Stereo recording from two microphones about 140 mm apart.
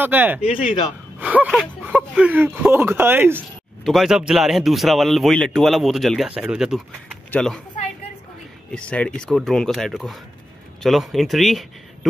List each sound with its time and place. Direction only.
0.0 s speech: 10° right (ahead or behind)
0.4 s speech: 40° left (ahead or behind)
1.2 s speech: 10° right (ahead or behind)
3.8 s speech: centre (ahead or behind)
7.2 s speech: 5° left (ahead or behind)
8.7 s speech: 10° left (ahead or behind)